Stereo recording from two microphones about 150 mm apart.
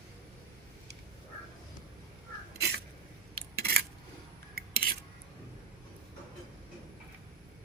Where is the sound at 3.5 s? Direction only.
90° right.